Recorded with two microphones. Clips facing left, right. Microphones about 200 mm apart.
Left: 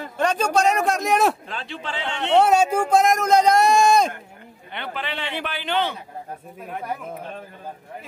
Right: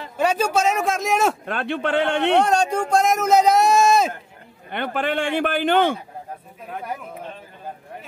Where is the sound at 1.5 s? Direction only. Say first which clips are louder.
Right 9 dB; 60° right (ahead or behind).